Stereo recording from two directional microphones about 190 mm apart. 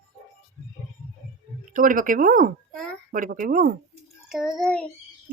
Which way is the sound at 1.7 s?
45° right (ahead or behind).